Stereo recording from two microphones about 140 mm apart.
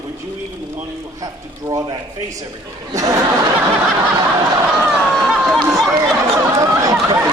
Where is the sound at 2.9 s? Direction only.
25° right (ahead or behind).